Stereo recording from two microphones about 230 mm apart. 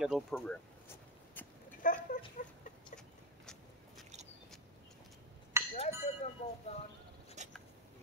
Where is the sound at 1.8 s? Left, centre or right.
Left.